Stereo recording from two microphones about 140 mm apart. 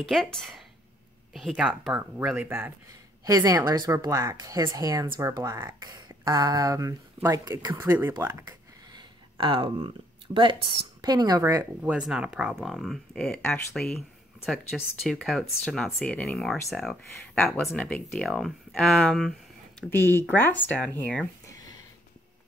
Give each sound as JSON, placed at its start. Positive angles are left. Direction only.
{"t": 0.0, "sound": "speech", "side_deg": 5}
{"t": 2.3, "sound": "speech", "side_deg": -15}
{"t": 3.3, "sound": "a woman's voice", "side_deg": -25}
{"t": 8.5, "sound": "a sound", "side_deg": -35}
{"t": 11.0, "sound": "a woman's voice", "side_deg": -30}
{"t": 11.8, "sound": "speech", "side_deg": -5}
{"t": 19.9, "sound": "speech", "side_deg": 15}